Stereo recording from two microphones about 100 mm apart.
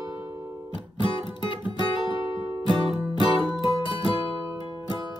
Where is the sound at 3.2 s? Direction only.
55° left (ahead or behind).